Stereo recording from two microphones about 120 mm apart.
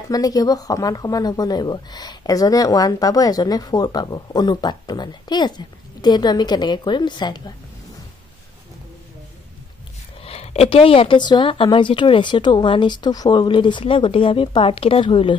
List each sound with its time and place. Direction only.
0.1 s speech: 30° left (ahead or behind)
10.2 s speech: 60° left (ahead or behind)